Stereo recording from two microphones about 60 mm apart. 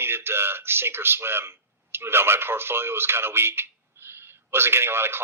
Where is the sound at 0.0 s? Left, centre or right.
Right.